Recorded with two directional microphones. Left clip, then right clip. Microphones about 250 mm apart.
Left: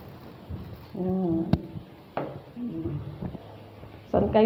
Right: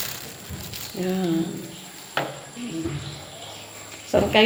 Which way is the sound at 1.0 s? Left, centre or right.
Centre.